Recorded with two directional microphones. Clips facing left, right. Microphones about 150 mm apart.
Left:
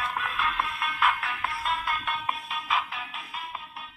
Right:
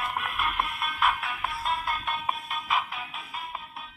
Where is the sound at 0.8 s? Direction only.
10° right (ahead or behind).